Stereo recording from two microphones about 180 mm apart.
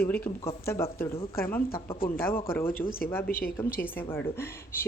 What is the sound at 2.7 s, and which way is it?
Speech, 55° left (ahead or behind).